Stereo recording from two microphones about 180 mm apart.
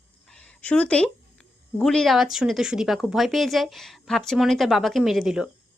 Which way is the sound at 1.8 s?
Centre (ahead or behind).